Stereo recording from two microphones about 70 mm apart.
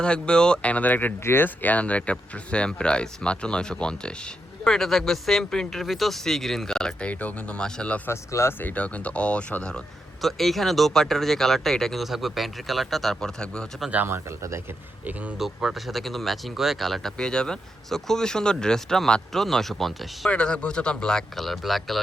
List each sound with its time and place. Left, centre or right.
0.0 s speech: centre
7.1 s speech: left
8.0 s speech: left
8.6 s speech: centre
10.2 s speech: centre
14.1 s speech: right
15.4 s speech: centre
20.3 s speech: centre